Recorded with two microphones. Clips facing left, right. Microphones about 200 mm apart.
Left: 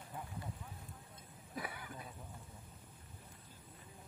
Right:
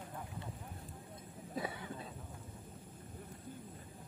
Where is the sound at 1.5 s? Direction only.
25° right (ahead or behind).